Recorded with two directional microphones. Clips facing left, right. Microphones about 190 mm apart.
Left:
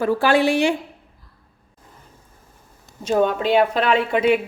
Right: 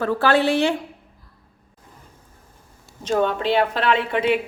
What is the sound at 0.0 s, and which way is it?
Speech, 10° left (ahead or behind).